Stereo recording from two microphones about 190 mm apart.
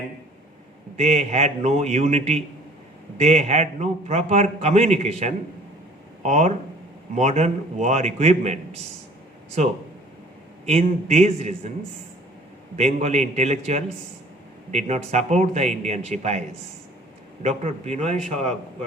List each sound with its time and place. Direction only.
0.9 s a man's voice: 35° right (ahead or behind)
10.7 s a man's voice: 35° right (ahead or behind)
12.7 s a man's voice: 35° right (ahead or behind)
17.4 s a man's voice: 35° right (ahead or behind)